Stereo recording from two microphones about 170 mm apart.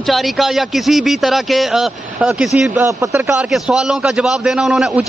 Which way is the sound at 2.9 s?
15° right (ahead or behind).